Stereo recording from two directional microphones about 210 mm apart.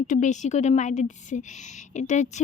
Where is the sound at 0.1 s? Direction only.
35° left (ahead or behind).